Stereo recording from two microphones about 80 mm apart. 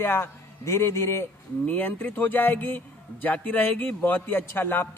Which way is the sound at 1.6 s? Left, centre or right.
Left.